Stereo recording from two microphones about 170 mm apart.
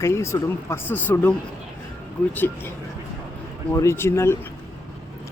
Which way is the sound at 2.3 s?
10° left (ahead or behind).